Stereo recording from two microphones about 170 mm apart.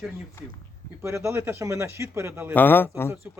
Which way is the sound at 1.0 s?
15° right (ahead or behind).